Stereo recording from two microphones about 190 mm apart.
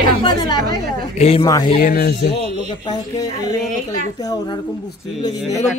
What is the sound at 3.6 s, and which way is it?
Speech, 40° right (ahead or behind).